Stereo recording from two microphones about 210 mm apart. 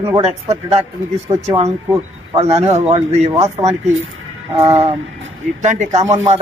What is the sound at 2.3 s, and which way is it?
Speech, 30° right (ahead or behind).